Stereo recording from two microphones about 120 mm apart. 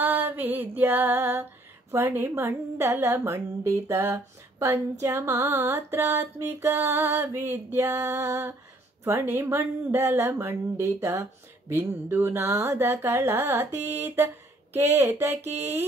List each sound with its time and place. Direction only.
0.0 s female singing: 15° right (ahead or behind)